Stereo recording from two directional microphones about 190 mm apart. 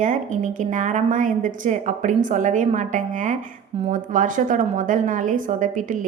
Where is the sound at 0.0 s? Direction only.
40° right (ahead or behind).